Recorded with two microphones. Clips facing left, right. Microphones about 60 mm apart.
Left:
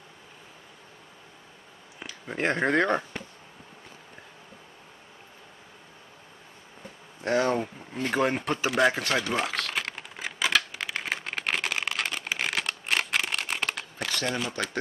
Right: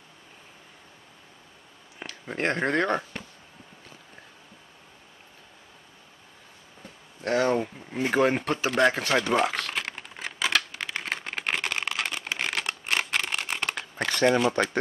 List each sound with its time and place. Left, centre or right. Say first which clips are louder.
2.0 s speech: even; centre
7.4 s speech: right 2 dB; centre
8.6 s speech: right 1 dB; centre
9.8 s typing: even; centre
12.4 s a sound: even; centre
14.0 s a sound: right 8 dB; right